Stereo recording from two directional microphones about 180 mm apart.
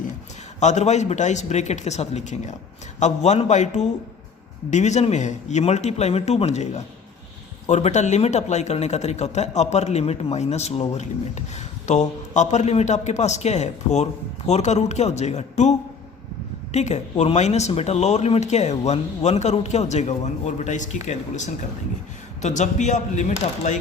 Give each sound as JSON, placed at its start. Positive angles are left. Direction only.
{"t": 0.6, "sound": "a man's voice", "side_deg": 40}
{"t": 16.7, "sound": "a man's voice", "side_deg": 40}